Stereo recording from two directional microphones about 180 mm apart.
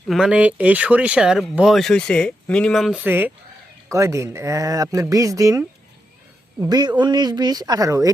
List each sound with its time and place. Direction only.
0.1 s speech: 5° right (ahead or behind)